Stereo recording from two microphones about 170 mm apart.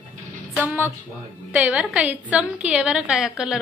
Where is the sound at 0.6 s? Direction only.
10° right (ahead or behind).